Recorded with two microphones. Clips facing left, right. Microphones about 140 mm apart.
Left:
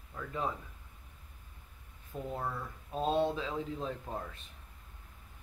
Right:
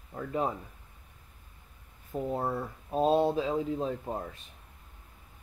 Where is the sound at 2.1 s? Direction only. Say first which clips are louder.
Right 7 dB; 35° right (ahead or behind).